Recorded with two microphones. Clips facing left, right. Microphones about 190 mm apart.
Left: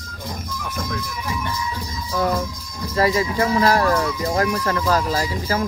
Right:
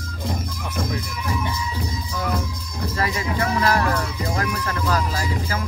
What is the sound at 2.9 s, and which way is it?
Speech, 30° left (ahead or behind).